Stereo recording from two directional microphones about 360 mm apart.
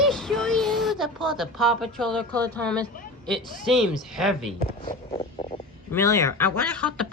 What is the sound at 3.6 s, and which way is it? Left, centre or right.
Speech, centre.